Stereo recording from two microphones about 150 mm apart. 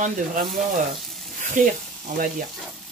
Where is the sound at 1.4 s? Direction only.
60° right (ahead or behind).